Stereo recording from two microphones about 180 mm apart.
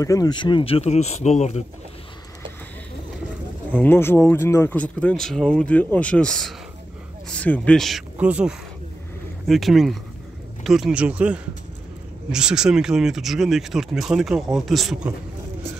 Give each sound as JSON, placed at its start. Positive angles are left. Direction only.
{"t": 0.0, "sound": "speech", "side_deg": 20}
{"t": 3.7, "sound": "speech", "side_deg": 10}